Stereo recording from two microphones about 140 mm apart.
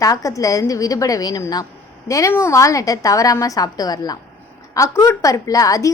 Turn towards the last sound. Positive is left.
turn(degrees=25)  # may be behind; listen again after turning